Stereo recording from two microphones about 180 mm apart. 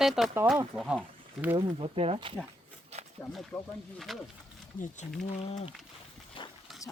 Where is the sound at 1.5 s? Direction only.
30° right (ahead or behind).